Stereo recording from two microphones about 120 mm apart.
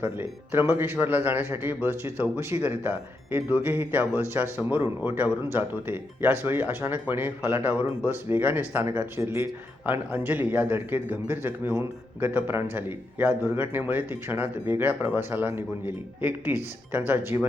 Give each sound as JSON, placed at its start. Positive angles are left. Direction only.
{"t": 0.0, "sound": "speech", "side_deg": -15}